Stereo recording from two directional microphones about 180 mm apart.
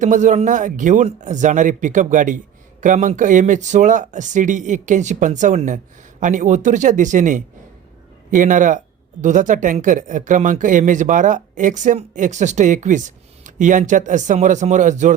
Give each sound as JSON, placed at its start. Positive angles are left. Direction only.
{"t": 0.0, "sound": "speech", "side_deg": -45}